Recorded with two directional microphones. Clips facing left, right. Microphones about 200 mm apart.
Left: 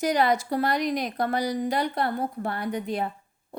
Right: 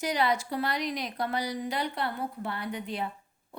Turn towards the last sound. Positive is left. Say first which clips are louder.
# left 6 dB
turn(degrees=45)  # may be behind; listen again after turning